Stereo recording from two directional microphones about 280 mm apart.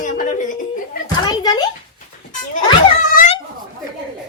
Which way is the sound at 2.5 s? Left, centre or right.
Left.